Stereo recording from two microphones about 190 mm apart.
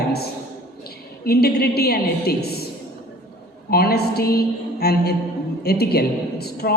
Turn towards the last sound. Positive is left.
turn(degrees=55)  # may be behind; listen again after turning